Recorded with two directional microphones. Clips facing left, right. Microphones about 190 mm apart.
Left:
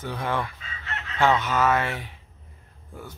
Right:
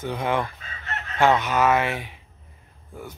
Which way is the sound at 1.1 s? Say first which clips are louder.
Right 2 dB; 15° right (ahead or behind).